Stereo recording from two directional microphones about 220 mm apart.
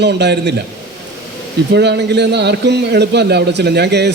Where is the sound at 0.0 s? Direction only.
50° right (ahead or behind).